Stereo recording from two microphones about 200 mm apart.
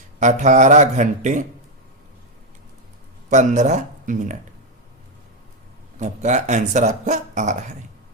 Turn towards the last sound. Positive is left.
turn(degrees=-35)  # may be behind; listen again after turning